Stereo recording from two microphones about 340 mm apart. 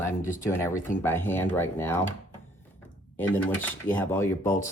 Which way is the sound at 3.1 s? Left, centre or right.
Centre.